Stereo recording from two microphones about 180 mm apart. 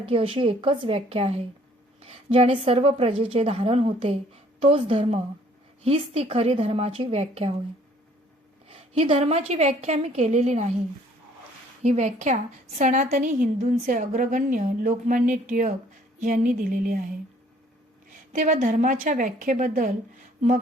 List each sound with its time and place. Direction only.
0.0 s a woman's voice: 30° right (ahead or behind)
8.7 s a woman's voice: 30° right (ahead or behind)
11.8 s a woman's voice: 40° right (ahead or behind)
18.3 s a woman's voice: 45° right (ahead or behind)